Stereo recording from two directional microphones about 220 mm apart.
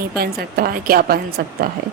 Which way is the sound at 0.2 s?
45° right (ahead or behind).